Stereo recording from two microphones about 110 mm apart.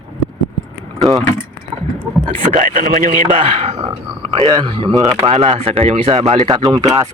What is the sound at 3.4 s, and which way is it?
Speech, 70° right (ahead or behind).